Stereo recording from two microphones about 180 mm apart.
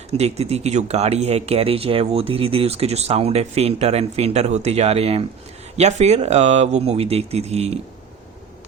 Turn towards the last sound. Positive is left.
turn(degrees=-35)  # may be behind; listen again after turning